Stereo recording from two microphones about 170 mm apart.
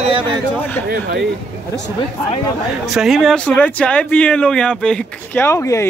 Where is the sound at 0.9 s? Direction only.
70° right (ahead or behind).